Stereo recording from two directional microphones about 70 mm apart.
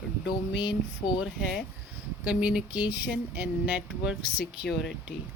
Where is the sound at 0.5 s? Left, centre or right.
Left.